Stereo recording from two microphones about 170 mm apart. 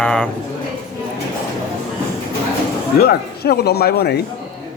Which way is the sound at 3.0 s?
65° left (ahead or behind).